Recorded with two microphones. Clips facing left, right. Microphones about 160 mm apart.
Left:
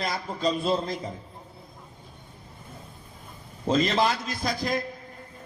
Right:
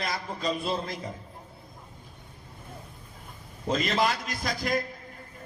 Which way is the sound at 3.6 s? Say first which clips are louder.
Left 3 dB; 30° left (ahead or behind).